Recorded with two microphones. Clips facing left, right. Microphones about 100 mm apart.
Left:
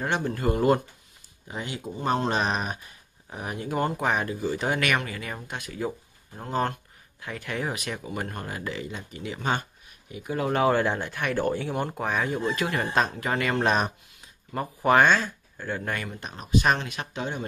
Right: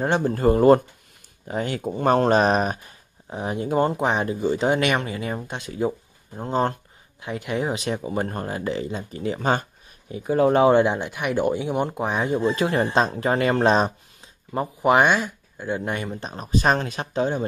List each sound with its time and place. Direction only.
0.0 s speech: 35° right (ahead or behind)
1.5 s speech: 50° right (ahead or behind)
3.3 s speech: 25° right (ahead or behind)
16.1 s speech: 35° right (ahead or behind)